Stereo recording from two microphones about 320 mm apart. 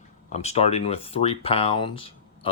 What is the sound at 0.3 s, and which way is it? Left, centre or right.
Speech, centre.